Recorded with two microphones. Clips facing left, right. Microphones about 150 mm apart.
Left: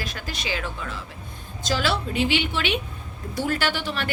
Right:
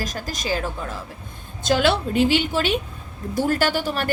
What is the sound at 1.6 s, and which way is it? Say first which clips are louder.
A woman's voice: right 6 dB; 55° right (ahead or behind).